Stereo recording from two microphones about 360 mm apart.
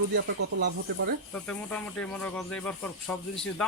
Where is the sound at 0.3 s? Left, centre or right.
Right.